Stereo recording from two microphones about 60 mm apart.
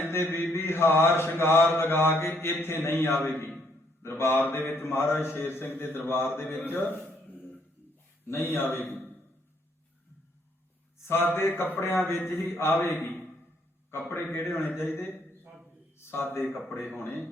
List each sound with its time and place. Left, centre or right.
0.0 s mantra: left
8.3 s mantra: left
11.0 s a man's voice: left
11.3 s mantra: left
13.9 s a man's voice: left
14.3 s mantra: left
16.0 s a sound: left
16.2 s mantra: left